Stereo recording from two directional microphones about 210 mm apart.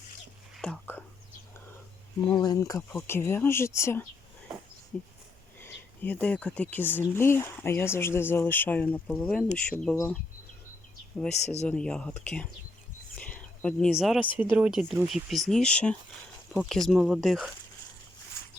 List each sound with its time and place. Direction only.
0.5 s whispering: 5° left (ahead or behind)
2.3 s speech: 20° left (ahead or behind)
11.4 s speech: 30° left (ahead or behind)
11.7 s speech: 5° left (ahead or behind)
13.1 s a sound: 5° left (ahead or behind)
14.3 s speech: 5° right (ahead or behind)